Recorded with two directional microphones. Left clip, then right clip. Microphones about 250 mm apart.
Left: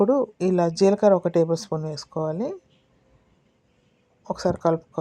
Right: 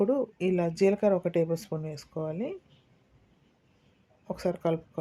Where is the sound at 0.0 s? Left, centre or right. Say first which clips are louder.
Left 6 dB; centre.